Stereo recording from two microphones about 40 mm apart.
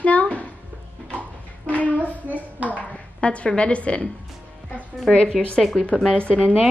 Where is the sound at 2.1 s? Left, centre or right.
Right.